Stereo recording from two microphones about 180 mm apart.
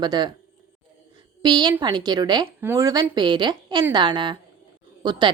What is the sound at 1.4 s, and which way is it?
A woman's voice, 25° right (ahead or behind).